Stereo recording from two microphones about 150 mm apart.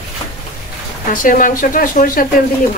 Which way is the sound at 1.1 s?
65° left (ahead or behind).